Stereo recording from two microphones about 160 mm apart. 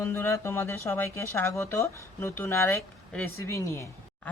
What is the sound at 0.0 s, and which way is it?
Speech, 15° left (ahead or behind).